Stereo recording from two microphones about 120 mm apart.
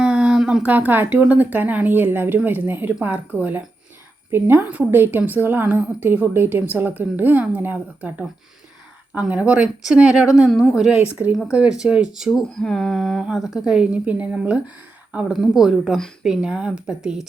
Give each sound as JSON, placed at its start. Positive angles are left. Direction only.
{"t": 0.0, "sound": "a woman's voice", "side_deg": -5}
{"t": 9.1, "sound": "a woman's voice", "side_deg": -10}